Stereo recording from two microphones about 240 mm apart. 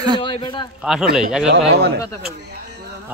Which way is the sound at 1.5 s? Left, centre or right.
Right.